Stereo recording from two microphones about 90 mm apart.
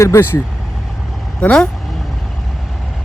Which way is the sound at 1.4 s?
10° left (ahead or behind).